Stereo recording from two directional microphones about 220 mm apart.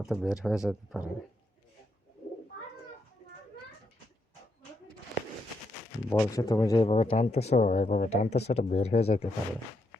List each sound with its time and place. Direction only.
0.0 s speech: centre (ahead or behind)
6.1 s speech: 15° left (ahead or behind)